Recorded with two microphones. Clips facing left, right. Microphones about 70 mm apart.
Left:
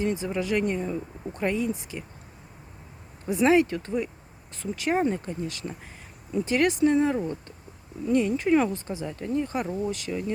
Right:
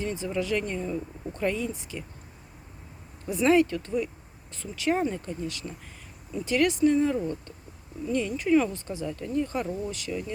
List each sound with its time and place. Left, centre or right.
0.0 s speech: left
3.2 s speech: left